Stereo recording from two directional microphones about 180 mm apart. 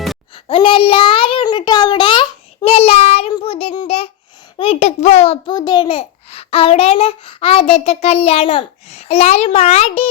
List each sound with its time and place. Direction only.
0.4 s a sound: 30° left (ahead or behind)
4.5 s a child's voice: 30° left (ahead or behind)
5.5 s a child's voice: 20° left (ahead or behind)